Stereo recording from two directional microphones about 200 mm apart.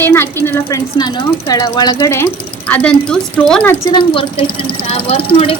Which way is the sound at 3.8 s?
25° left (ahead or behind).